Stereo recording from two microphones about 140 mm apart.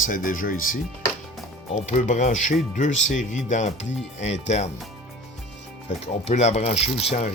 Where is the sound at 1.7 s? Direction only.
55° left (ahead or behind).